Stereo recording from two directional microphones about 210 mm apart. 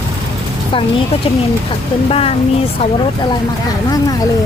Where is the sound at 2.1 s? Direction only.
25° left (ahead or behind).